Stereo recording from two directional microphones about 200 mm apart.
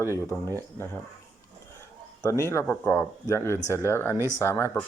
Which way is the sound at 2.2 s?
15° left (ahead or behind).